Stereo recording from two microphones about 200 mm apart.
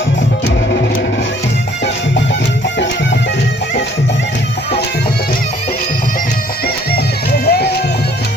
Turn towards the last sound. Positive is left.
turn(degrees=55)  # may be behind; listen again after turning